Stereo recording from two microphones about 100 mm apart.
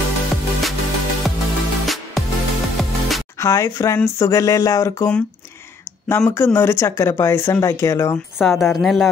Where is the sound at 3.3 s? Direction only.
30° left (ahead or behind).